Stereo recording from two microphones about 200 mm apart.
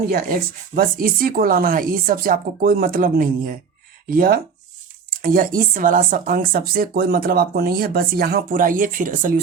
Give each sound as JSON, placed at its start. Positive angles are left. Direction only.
{"t": 0.1, "sound": "speech", "side_deg": -50}